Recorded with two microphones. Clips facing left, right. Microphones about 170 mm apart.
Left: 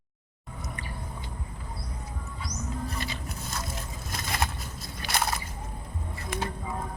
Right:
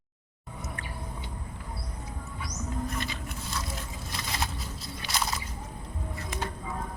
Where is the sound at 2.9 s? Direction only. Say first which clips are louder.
Even; 40° left (ahead or behind).